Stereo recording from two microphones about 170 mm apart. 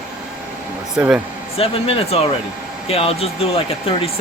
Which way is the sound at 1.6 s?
35° left (ahead or behind).